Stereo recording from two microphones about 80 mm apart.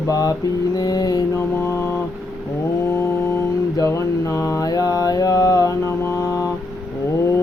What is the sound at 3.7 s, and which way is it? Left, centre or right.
Mantra, left.